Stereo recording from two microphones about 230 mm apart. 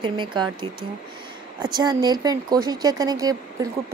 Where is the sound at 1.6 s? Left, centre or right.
Centre.